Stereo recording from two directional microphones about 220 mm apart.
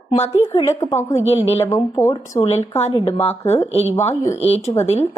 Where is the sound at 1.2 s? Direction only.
25° left (ahead or behind).